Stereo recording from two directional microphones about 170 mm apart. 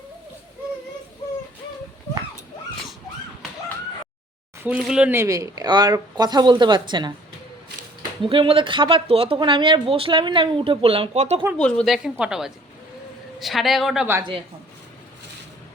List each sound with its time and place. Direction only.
4.6 s speech: 5° right (ahead or behind); by 7.1 s 25° right (ahead or behind)
8.2 s speech: 30° right (ahead or behind)
11.5 s a man's voice: 5° left (ahead or behind)